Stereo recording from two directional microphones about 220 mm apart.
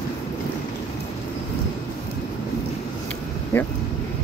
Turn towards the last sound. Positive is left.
turn(degrees=10)  # may be behind; listen again after turning